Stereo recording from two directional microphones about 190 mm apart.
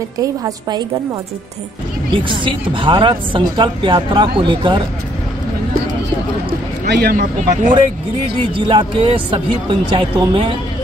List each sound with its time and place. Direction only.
0.2 s a woman's voice: 20° right (ahead or behind)
2.1 s a woman's voice: 25° right (ahead or behind)
6.9 s speech: 55° right (ahead or behind)
8.5 s a woman's voice: 25° right (ahead or behind)